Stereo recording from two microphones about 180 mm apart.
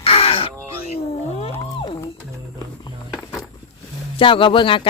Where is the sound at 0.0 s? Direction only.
35° left (ahead or behind).